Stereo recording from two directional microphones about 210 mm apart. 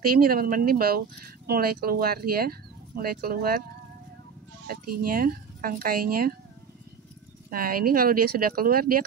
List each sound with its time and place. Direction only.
0.1 s speech: 45° right (ahead or behind)
4.6 s speech: 45° right (ahead or behind)
7.4 s speech: 45° right (ahead or behind)